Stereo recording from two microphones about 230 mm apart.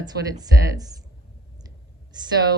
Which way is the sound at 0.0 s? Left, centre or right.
Centre.